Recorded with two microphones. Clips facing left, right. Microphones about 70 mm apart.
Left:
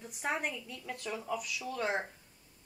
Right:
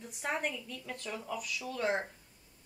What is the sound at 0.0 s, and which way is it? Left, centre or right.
A woman's voice, centre.